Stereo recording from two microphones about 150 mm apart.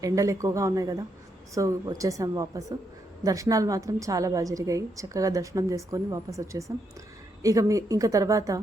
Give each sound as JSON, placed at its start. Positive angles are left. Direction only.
{"t": 0.0, "sound": "a woman's voice", "side_deg": -20}